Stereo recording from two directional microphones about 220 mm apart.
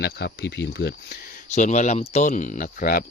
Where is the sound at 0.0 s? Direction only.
50° left (ahead or behind).